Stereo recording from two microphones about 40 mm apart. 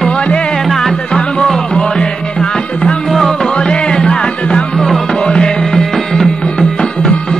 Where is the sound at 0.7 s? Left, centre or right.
Centre.